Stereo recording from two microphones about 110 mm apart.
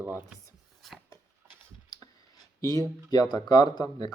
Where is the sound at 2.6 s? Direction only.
35° left (ahead or behind).